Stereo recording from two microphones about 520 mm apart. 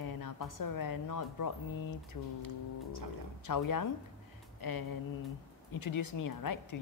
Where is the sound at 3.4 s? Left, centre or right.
Left.